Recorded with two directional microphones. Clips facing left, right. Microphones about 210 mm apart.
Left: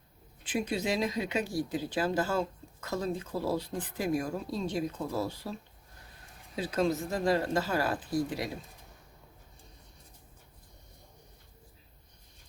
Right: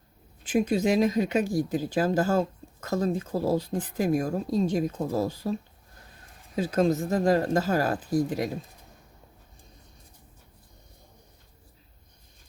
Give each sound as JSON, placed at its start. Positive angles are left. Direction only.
{"t": 0.4, "sound": "speech", "side_deg": -45}
{"t": 6.6, "sound": "speech", "side_deg": -45}